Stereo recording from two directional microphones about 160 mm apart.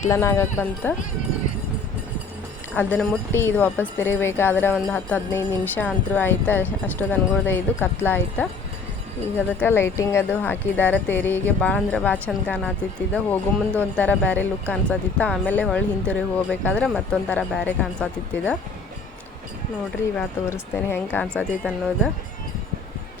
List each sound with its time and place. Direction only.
0.1 s speech: 15° left (ahead or behind)
2.7 s speech: 5° left (ahead or behind)
9.6 s speech: 15° left (ahead or behind)
20.1 s speech: 10° left (ahead or behind)